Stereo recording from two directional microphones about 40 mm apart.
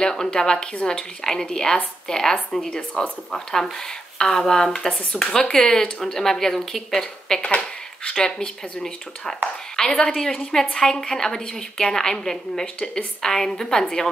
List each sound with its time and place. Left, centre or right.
0.0 s a woman's voice: centre